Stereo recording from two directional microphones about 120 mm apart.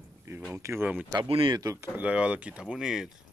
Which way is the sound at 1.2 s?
45° right (ahead or behind).